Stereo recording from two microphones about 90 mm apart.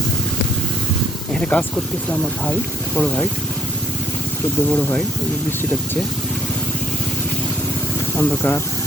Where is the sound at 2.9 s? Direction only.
15° left (ahead or behind).